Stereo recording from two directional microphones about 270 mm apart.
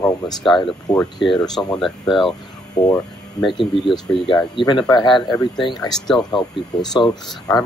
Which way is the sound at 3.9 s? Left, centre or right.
Centre.